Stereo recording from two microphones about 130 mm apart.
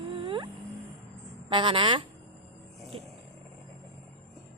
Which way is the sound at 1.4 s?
40° right (ahead or behind).